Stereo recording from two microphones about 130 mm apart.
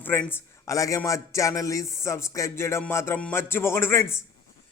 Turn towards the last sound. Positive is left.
turn(degrees=20)  # may be behind; listen again after turning